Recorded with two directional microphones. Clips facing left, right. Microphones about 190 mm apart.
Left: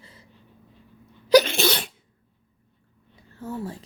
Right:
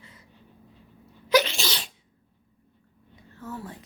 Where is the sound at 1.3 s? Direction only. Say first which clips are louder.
Left 6 dB; 50° left (ahead or behind).